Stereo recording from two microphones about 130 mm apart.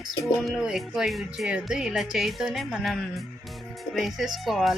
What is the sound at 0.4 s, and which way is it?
Speech, 5° right (ahead or behind).